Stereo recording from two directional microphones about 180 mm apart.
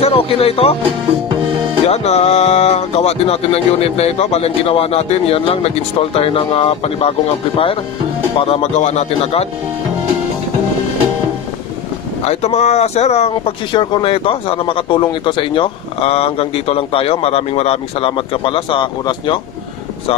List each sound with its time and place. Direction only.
0.0 s speech: 30° left (ahead or behind)
1.9 s speech: 35° left (ahead or behind)
12.3 s speech: 35° left (ahead or behind)